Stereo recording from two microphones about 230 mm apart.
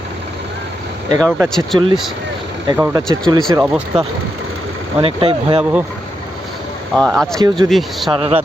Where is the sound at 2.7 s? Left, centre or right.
Centre.